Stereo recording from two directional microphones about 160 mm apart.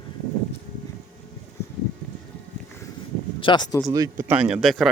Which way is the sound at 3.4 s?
30° left (ahead or behind).